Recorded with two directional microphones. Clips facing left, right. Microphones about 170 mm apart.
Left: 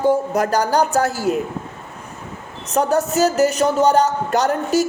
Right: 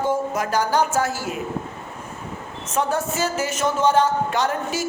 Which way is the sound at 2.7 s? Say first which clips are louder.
Left 6 dB; 40° left (ahead or behind).